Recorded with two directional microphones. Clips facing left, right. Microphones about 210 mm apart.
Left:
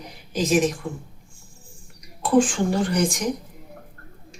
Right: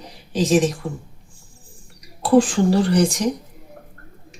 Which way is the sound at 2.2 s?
35° right (ahead or behind).